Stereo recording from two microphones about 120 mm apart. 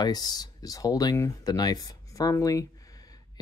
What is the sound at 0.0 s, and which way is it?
Speech, 35° left (ahead or behind).